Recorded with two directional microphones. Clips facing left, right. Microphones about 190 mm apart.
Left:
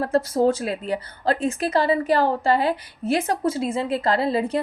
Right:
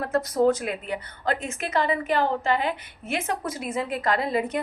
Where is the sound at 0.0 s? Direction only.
30° left (ahead or behind).